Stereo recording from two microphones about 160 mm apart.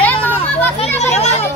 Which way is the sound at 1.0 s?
45° left (ahead or behind).